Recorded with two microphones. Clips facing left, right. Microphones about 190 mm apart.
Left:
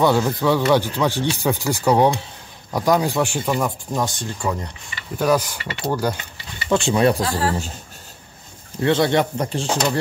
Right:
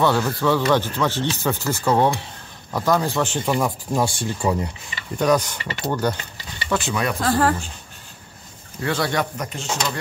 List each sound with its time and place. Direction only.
0.0 s speech: 15° left (ahead or behind)
3.4 s speech: centre (ahead or behind)
5.1 s speech: 5° left (ahead or behind)
6.7 s speech: 25° left (ahead or behind)
7.2 s speech: 50° right (ahead or behind)
8.8 s speech: 25° left (ahead or behind)